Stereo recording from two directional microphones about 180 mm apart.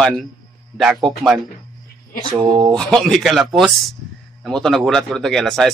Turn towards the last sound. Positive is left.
turn(degrees=0)  # may be behind; listen again after turning